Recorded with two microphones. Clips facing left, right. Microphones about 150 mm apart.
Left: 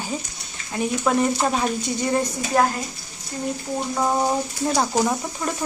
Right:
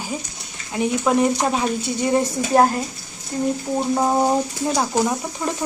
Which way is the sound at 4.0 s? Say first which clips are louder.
Right 2 dB; 20° right (ahead or behind).